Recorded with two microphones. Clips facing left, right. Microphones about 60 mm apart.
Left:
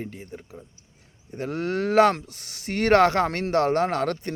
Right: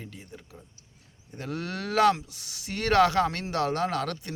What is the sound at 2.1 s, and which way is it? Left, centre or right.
Speech, left.